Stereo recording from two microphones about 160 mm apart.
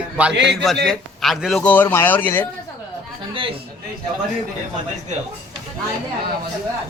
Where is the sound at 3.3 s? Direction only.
35° right (ahead or behind).